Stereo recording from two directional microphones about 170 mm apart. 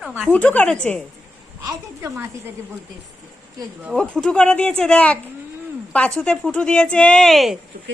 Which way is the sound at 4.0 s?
5° left (ahead or behind).